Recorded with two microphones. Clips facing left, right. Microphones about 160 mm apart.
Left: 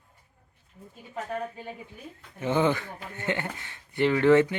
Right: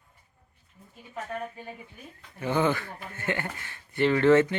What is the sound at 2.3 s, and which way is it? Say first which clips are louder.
Speech: left 1 dB; 20° left (ahead or behind).